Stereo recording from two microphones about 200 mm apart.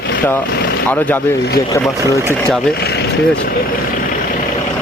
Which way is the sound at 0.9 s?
10° left (ahead or behind).